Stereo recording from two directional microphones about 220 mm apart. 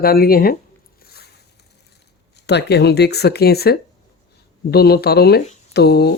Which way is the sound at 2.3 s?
50° left (ahead or behind).